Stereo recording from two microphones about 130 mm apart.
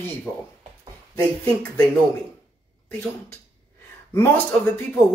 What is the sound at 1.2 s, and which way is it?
Speech, 15° left (ahead or behind).